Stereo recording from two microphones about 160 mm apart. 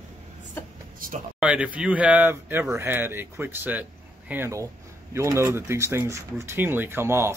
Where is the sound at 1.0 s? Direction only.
60° right (ahead or behind).